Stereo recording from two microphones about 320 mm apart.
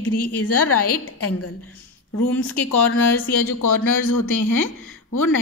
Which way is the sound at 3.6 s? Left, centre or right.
Left.